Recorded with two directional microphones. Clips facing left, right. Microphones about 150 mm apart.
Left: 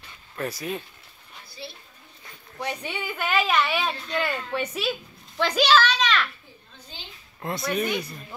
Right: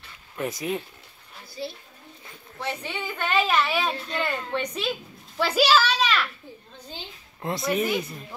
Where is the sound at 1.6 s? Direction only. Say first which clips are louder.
Right 7 dB; 40° right (ahead or behind).